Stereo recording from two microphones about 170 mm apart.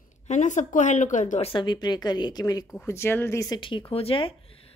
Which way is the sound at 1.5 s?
30° left (ahead or behind).